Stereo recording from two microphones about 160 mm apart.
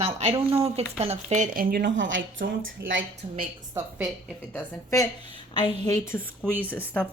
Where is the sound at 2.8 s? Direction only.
90° right.